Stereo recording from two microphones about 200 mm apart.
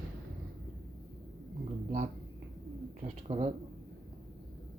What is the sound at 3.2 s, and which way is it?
Speech, 30° right (ahead or behind).